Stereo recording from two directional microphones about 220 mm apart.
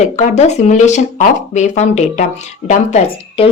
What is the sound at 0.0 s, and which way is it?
Speech, 30° left (ahead or behind).